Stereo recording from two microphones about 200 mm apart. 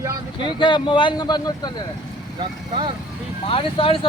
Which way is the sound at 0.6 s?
25° left (ahead or behind).